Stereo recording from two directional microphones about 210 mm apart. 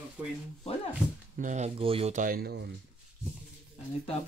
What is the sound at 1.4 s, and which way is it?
Speech, 35° right (ahead or behind).